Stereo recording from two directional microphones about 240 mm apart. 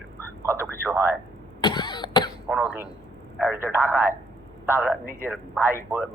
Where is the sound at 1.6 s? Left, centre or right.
Centre.